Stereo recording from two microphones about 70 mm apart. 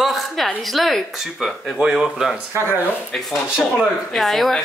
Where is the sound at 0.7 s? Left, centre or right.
Centre.